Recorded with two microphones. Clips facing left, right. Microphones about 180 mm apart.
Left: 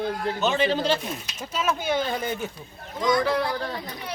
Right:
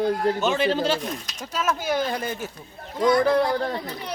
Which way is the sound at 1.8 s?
5° right (ahead or behind).